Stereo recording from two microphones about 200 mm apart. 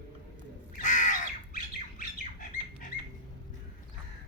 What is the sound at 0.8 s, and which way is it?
Squawk, 40° left (ahead or behind).